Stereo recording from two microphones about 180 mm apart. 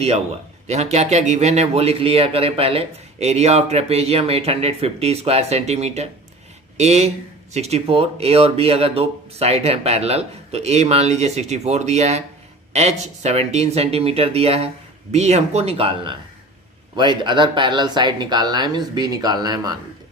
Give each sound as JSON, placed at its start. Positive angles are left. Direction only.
{"t": 0.7, "sound": "a man's voice", "side_deg": -35}